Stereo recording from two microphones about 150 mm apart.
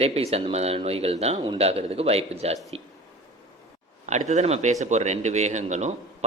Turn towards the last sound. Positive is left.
turn(degrees=-50)  # may be behind; listen again after turning